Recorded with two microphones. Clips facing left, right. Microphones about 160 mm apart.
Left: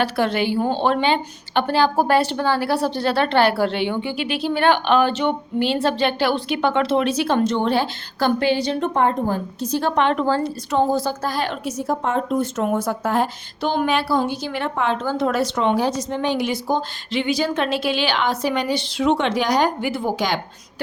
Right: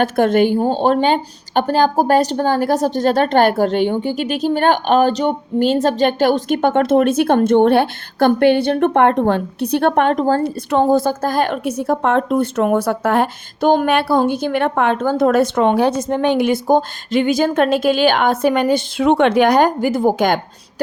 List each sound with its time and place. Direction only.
0.0 s a woman's voice: 50° right (ahead or behind)